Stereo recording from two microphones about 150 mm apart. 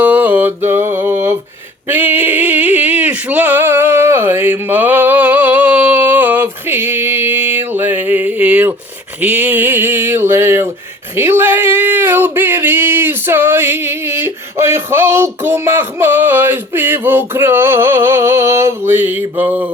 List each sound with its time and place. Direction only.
0.0 s mantra: 10° right (ahead or behind)
1.9 s a sound: 10° right (ahead or behind)
9.2 s speech: 10° right (ahead or behind)